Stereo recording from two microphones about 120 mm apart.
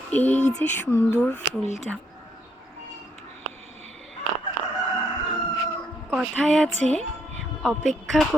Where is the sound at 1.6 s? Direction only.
70° left (ahead or behind).